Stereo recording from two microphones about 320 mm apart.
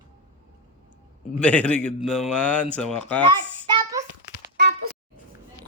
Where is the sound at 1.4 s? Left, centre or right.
Centre.